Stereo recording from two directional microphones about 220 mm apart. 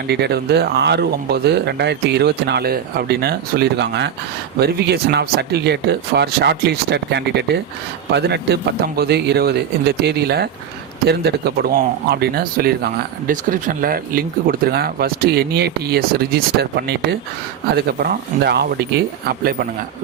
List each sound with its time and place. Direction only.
0.1 s speech: 50° right (ahead or behind)